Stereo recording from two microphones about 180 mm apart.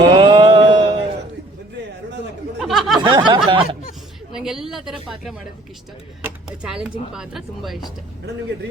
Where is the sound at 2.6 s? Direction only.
Centre (ahead or behind).